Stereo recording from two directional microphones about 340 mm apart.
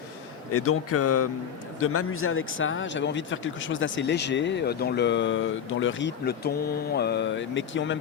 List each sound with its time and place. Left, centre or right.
0.5 s speech: left